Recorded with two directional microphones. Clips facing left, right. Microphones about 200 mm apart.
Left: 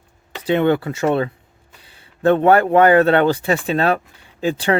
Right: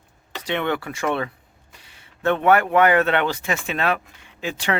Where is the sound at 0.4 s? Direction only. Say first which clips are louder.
Left 8 dB; 30° left (ahead or behind).